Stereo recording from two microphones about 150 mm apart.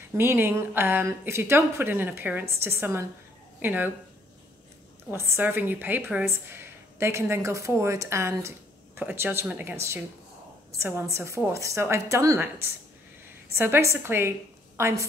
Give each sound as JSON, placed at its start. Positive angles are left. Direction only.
{"t": 0.1, "sound": "a woman's voice", "side_deg": -15}
{"t": 5.1, "sound": "a woman's voice", "side_deg": -15}